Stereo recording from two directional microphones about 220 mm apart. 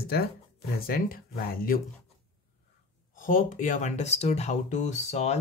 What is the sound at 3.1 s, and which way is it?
Speech, 35° left (ahead or behind).